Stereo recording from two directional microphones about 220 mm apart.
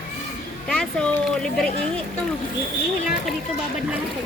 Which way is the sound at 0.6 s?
5° left (ahead or behind).